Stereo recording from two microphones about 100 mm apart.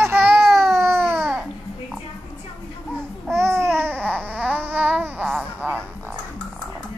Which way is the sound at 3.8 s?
20° right (ahead or behind).